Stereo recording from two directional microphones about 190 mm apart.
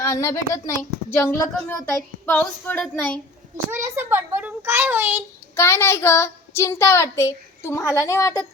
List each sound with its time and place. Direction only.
0.0 s speech: 15° left (ahead or behind)
3.7 s a child's voice: 15° right (ahead or behind)
5.5 s speech: 15° left (ahead or behind)